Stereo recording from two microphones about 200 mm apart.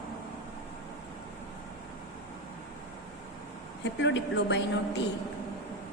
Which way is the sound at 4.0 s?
65° left (ahead or behind).